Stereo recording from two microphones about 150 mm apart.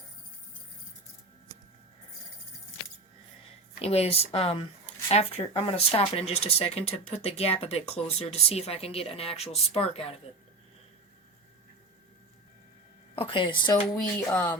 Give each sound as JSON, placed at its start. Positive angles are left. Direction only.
{"t": 3.8, "sound": "speech", "side_deg": 45}
{"t": 13.1, "sound": "a woman's voice", "side_deg": 35}
{"t": 13.9, "sound": "speech", "side_deg": 20}